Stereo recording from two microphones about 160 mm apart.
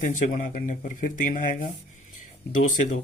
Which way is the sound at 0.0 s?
55° left (ahead or behind).